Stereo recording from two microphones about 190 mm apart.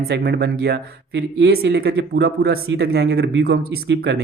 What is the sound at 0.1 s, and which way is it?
Speech, 55° right (ahead or behind).